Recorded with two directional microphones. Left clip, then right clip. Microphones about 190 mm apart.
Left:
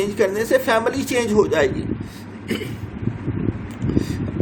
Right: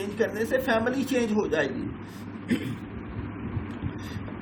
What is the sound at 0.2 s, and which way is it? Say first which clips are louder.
Speech: left 7 dB; 60° left (ahead or behind).